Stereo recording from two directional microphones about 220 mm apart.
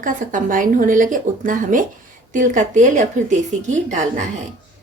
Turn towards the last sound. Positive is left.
turn(degrees=-35)  # may be behind; listen again after turning